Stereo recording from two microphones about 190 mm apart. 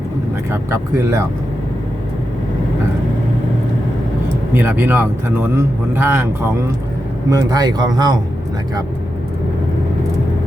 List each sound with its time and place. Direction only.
0.5 s speech: 15° right (ahead or behind)
4.5 s speech: 10° right (ahead or behind)
7.3 s speech: 20° right (ahead or behind)